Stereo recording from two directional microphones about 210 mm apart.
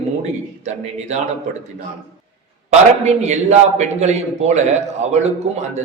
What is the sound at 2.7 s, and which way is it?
A man's voice, 35° right (ahead or behind).